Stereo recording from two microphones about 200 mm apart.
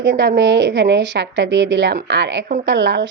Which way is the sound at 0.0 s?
60° right (ahead or behind).